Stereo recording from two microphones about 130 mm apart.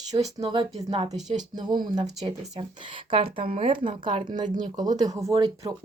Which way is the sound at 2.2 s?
35° right (ahead or behind).